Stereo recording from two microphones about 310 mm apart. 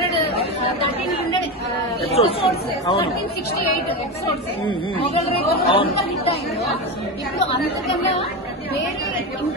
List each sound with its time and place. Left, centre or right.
2.0 s speech: centre
4.9 s speech: centre